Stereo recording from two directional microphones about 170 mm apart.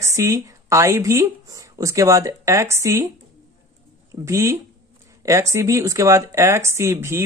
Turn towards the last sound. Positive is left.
turn(degrees=-15)  # may be behind; listen again after turning